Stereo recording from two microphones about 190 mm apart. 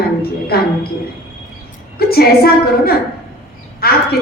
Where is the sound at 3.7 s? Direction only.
55° left (ahead or behind).